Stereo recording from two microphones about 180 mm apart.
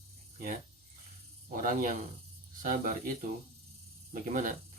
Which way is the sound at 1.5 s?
50° right (ahead or behind).